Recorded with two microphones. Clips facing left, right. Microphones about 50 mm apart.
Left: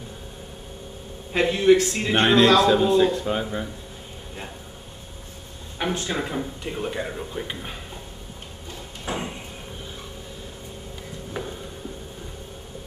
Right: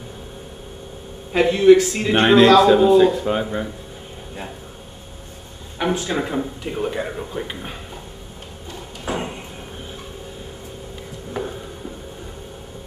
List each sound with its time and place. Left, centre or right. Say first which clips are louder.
1.3 s a man's voice: right 5 dB; centre
5.8 s speech: right 5 dB; centre
9.0 s a sound: right 4 dB; centre